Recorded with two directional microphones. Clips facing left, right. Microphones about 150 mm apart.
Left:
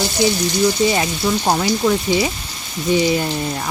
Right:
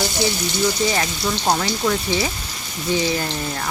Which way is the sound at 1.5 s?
15° left (ahead or behind).